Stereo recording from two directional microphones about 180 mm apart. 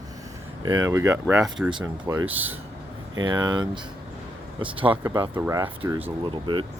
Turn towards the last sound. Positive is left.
turn(degrees=-25)  # may be behind; listen again after turning